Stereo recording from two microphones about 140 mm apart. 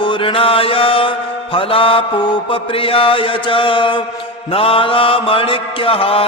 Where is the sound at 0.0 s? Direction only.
35° left (ahead or behind).